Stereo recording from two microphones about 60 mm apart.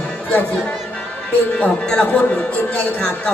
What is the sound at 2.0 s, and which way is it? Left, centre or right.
A man's voice, left.